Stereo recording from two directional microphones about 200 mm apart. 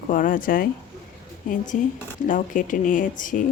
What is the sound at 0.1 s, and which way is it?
Speech, 40° left (ahead or behind).